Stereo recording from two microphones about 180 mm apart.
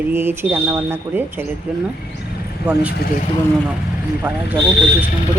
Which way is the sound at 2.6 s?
60° left (ahead or behind).